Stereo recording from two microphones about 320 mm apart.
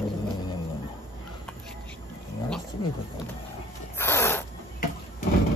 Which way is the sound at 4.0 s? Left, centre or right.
Centre.